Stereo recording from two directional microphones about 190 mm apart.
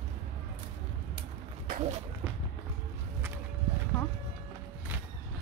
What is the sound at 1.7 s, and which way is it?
Speech, 35° right (ahead or behind).